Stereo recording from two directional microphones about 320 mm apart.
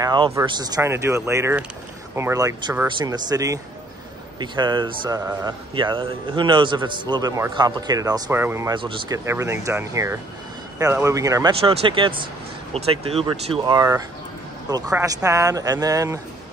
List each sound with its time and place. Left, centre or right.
0.0 s speech: centre